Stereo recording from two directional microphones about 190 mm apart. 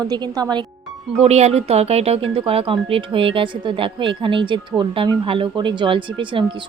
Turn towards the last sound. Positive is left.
turn(degrees=-25)  # may be behind; listen again after turning